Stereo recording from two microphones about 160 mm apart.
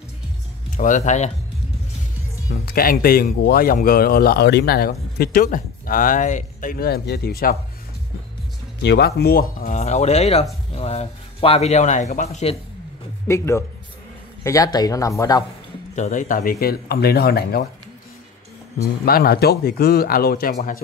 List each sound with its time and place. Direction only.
0.7 s speech: 50° left (ahead or behind)
2.6 s speech: 65° left (ahead or behind)
8.8 s speech: 90° left; by 9.8 s 70° left (ahead or behind)
9.8 s a man's voice: 45° left (ahead or behind)
13.3 s a man's voice: 15° left (ahead or behind)
15.9 s speech: 50° left (ahead or behind); by 17.6 s 75° left (ahead or behind)
19.0 s speech: 70° left (ahead or behind)
20.5 s speech: 55° left (ahead or behind)